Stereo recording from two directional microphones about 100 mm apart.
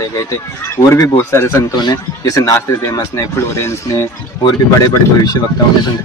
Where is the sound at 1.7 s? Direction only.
40° left (ahead or behind).